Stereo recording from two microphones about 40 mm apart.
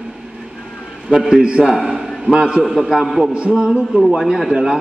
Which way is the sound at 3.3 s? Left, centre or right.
Right.